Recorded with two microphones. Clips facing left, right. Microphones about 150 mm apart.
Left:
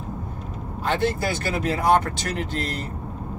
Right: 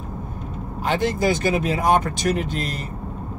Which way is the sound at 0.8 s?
15° right (ahead or behind).